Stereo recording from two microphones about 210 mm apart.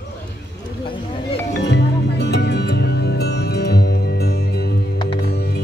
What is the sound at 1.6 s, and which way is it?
Music, 55° left (ahead or behind).